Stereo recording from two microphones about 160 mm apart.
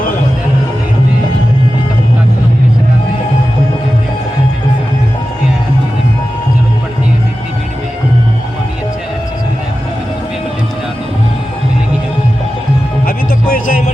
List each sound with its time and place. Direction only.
13.1 s music: 60° left (ahead or behind)